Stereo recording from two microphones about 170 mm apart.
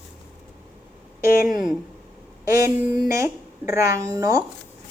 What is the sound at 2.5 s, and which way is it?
Child singing, 20° right (ahead or behind).